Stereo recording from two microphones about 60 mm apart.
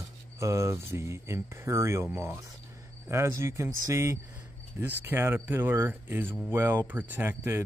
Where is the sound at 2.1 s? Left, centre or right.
Right.